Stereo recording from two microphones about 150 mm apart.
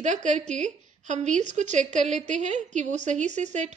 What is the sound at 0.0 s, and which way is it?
A woman's voice, 55° right (ahead or behind).